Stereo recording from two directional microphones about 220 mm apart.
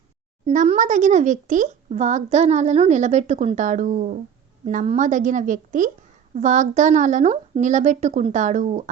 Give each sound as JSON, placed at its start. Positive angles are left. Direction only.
{"t": 0.4, "sound": "speech", "side_deg": -30}